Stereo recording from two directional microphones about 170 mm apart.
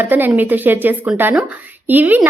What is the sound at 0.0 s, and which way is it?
A woman's voice, 10° right (ahead or behind).